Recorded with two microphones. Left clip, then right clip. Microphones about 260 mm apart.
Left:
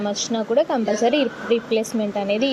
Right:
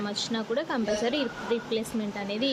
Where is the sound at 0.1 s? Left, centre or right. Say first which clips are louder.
Left 9 dB; centre.